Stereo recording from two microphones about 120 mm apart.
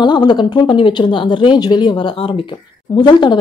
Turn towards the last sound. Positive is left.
turn(degrees=40)  # may be behind; listen again after turning